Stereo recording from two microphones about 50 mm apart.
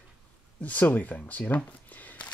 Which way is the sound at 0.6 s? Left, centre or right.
Left.